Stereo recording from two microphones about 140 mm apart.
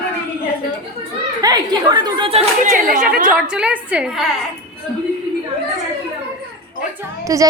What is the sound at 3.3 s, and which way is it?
Speech, 5° right (ahead or behind).